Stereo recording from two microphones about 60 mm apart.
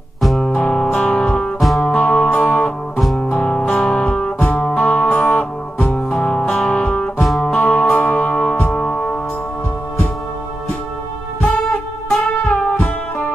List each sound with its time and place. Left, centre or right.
0.2 s music: centre
0.5 s music: centre
1.6 s music: centre
2.0 s music: left
3.0 s music: centre
3.3 s music: centre
7.2 s music: centre
7.4 s music: left
11.5 s music: centre